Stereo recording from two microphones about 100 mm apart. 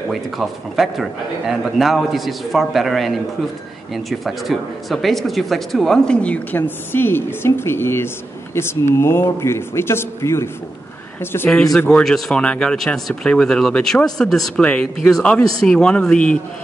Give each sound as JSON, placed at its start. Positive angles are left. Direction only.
{"t": 0.1, "sound": "speech", "side_deg": 0}
{"t": 11.5, "sound": "speech", "side_deg": 5}